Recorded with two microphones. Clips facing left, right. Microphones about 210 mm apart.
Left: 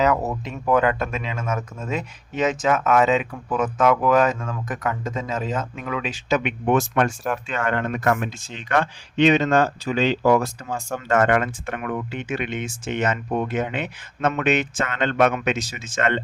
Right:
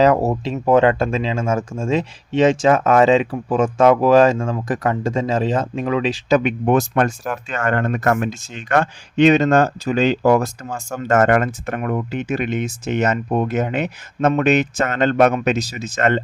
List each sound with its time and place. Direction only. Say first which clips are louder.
0.0 s speech: right 6 dB; 30° right (ahead or behind)